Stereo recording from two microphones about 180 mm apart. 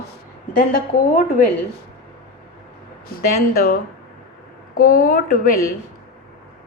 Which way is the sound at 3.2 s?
55° left (ahead or behind).